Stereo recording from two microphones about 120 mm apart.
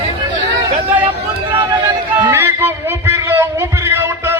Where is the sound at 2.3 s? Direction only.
15° right (ahead or behind).